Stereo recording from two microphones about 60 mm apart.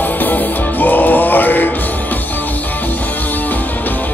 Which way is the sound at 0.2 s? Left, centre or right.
Left.